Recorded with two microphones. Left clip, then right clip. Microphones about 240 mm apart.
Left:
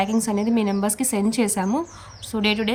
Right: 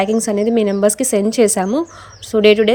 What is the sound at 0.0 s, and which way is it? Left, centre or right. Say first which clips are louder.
A woman's voice: right 7 dB; centre.